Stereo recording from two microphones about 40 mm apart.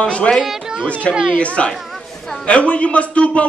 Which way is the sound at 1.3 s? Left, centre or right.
Left.